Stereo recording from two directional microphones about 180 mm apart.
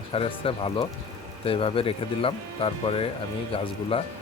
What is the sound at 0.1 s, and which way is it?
Speech, 30° left (ahead or behind).